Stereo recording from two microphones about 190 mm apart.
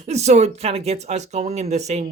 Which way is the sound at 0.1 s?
35° right (ahead or behind).